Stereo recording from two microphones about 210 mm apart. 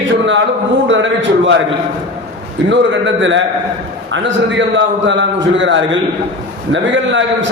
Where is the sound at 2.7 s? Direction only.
60° right (ahead or behind).